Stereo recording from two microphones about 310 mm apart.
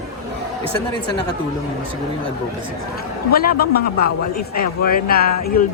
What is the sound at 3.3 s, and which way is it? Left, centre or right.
A man's voice, left.